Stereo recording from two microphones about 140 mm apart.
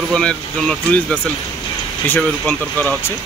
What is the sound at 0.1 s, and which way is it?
Speech, 5° left (ahead or behind).